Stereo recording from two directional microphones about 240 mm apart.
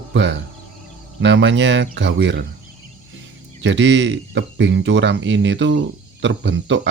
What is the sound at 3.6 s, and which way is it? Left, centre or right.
Speech, right.